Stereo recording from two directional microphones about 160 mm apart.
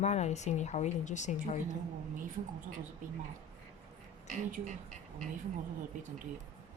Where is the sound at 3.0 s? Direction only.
55° right (ahead or behind).